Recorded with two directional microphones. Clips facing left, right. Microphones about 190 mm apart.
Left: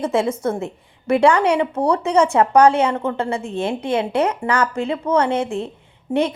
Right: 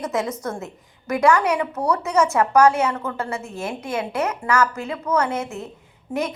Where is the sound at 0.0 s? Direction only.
30° left (ahead or behind).